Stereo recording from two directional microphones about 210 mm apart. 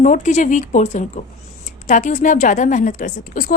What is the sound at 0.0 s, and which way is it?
A woman's voice, 35° left (ahead or behind).